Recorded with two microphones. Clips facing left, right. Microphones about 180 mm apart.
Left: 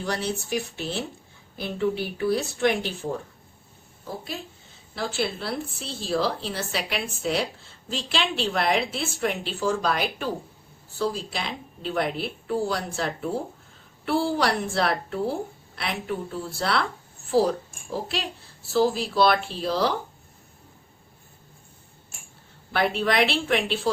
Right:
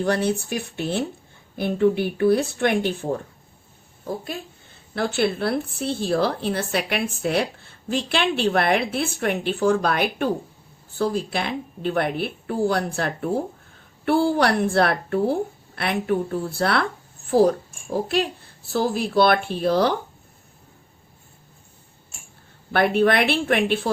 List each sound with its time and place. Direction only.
0.0 s a woman's voice: 55° right (ahead or behind)
4.2 s a woman's voice: 55° right (ahead or behind)
18.7 s a woman's voice: 55° right (ahead or behind)
22.7 s a woman's voice: 55° right (ahead or behind)